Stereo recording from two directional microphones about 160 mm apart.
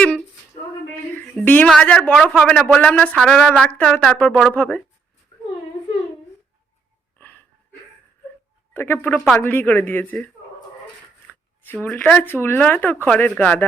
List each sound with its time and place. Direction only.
1.1 s speech: 10° left (ahead or behind)
7.2 s dog: 10° left (ahead or behind)
8.7 s speech: 15° left (ahead or behind)
11.3 s speech: 10° left (ahead or behind)